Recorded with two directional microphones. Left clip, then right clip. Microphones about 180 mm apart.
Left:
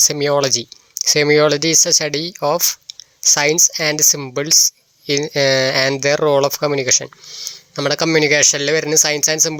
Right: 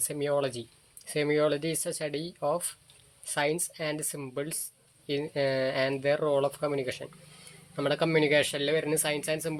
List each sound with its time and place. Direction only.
0.0 s speech: 65° left (ahead or behind)